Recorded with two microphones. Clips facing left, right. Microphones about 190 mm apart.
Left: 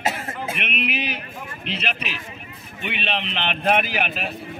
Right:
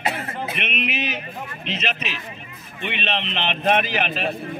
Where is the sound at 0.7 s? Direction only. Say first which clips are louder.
Right 1 dB; 10° left (ahead or behind).